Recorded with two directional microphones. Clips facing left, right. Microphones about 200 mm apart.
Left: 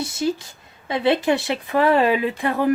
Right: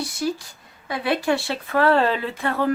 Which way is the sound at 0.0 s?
25° left (ahead or behind).